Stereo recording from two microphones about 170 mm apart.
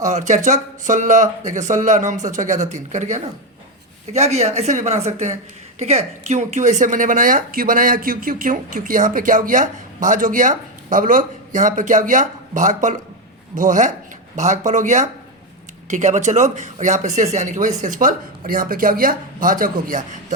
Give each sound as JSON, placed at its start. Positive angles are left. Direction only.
{"t": 0.0, "sound": "a woman's voice", "side_deg": -45}